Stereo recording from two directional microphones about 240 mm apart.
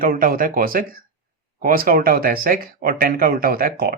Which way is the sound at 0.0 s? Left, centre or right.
Right.